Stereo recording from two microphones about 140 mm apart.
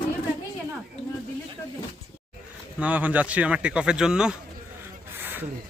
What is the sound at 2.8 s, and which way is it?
Speech, 10° right (ahead or behind).